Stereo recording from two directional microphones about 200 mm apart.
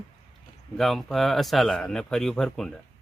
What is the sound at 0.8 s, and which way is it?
Speech, centre (ahead or behind).